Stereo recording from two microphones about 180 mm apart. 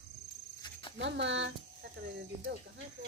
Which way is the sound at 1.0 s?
85° right.